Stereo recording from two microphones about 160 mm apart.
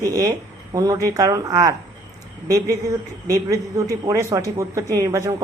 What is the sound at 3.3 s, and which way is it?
A woman's voice, 20° right (ahead or behind).